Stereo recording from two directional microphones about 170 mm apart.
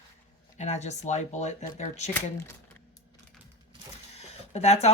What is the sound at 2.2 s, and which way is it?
Speech, 15° left (ahead or behind).